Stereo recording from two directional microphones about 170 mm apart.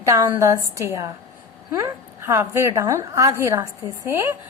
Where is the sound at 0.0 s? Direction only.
15° right (ahead or behind).